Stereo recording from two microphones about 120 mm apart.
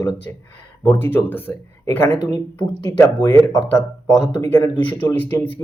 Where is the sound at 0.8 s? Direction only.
20° left (ahead or behind).